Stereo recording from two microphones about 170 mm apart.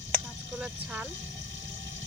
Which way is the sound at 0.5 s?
5° right (ahead or behind).